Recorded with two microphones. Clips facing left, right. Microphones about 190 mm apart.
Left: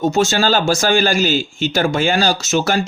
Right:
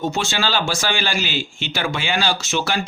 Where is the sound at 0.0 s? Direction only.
40° left (ahead or behind).